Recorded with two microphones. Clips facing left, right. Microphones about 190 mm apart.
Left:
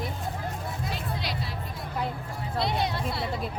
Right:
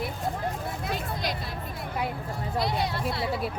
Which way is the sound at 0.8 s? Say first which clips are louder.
Right 3 dB; 50° right (ahead or behind).